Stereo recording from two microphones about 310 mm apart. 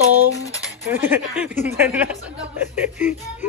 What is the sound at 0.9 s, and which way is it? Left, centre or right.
A man's voice, centre.